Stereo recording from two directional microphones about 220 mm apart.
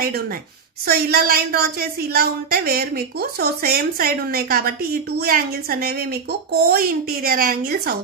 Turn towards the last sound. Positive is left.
turn(degrees=-40)  # may be behind; listen again after turning